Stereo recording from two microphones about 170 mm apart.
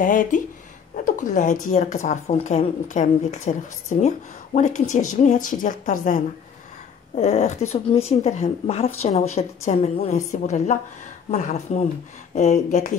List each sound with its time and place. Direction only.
0.0 s speech: 50° left (ahead or behind)